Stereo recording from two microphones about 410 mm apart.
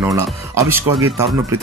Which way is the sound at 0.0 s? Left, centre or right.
Centre.